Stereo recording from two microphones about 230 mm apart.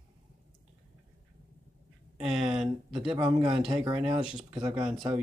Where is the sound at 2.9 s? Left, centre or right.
Right.